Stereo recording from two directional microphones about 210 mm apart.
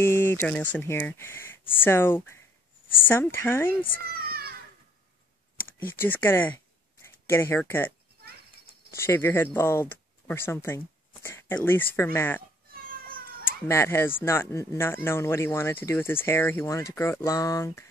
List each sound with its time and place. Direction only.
0.0 s speech: 10° left (ahead or behind)
4.0 s children playing: 45° right (ahead or behind)
5.8 s speech: 10° left (ahead or behind)
8.9 s speech: 10° left (ahead or behind)
13.7 s speech: 10° left (ahead or behind)